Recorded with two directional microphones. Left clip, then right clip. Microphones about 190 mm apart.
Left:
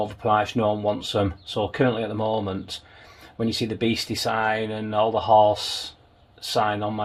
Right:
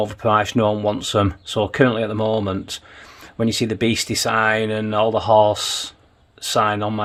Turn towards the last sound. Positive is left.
turn(degrees=-55)  # may be behind; listen again after turning